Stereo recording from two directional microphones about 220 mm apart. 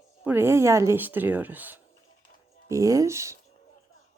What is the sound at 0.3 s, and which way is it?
Speech, 10° right (ahead or behind).